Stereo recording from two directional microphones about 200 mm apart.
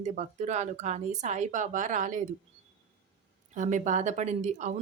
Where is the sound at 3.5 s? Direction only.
40° right (ahead or behind).